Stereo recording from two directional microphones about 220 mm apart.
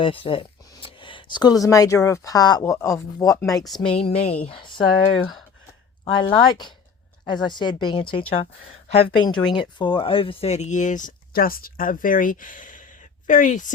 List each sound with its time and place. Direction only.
0.0 s speech: 25° left (ahead or behind)